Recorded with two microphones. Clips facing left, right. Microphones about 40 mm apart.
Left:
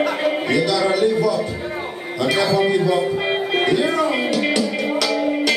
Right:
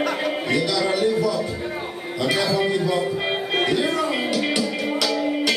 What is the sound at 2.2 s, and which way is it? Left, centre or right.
Speech, centre.